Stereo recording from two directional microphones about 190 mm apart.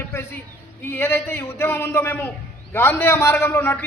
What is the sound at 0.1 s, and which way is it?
A man's voice, 10° left (ahead or behind).